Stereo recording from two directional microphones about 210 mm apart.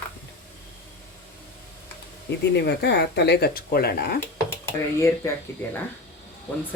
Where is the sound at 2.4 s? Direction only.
55° left (ahead or behind).